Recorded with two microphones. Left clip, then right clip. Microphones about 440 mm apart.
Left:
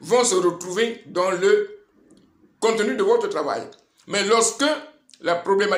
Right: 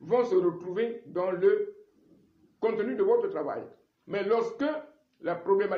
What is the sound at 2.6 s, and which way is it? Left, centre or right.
A man's voice, right.